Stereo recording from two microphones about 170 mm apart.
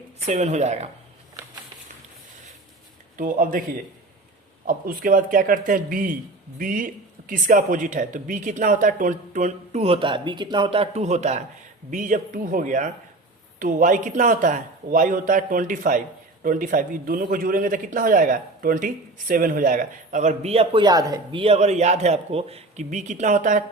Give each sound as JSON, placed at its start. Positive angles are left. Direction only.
{"t": 0.2, "sound": "speech", "side_deg": -40}
{"t": 3.2, "sound": "speech", "side_deg": -55}
{"t": 4.6, "sound": "speech", "side_deg": -55}
{"t": 20.8, "sound": "speech", "side_deg": -20}
{"t": 21.4, "sound": "speech", "side_deg": -40}